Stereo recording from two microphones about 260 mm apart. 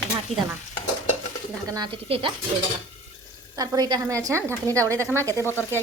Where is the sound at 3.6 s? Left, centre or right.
Centre.